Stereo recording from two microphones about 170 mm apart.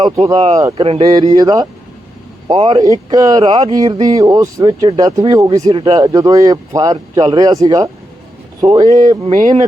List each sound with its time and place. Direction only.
0.6 s speech: 30° right (ahead or behind)
9.3 s speech: 50° right (ahead or behind)